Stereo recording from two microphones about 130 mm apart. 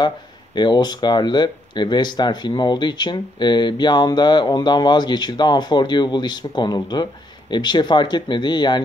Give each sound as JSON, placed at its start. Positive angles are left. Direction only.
{"t": 0.6, "sound": "speech", "side_deg": 35}